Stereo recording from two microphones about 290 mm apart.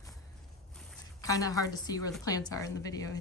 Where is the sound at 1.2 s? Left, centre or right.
Centre.